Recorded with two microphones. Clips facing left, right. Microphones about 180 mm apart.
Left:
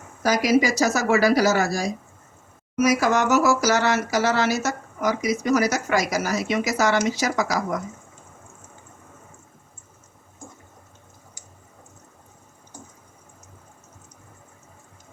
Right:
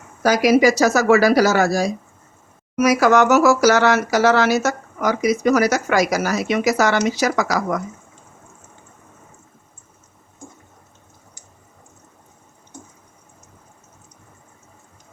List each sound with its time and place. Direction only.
0.2 s speech: 75° right (ahead or behind)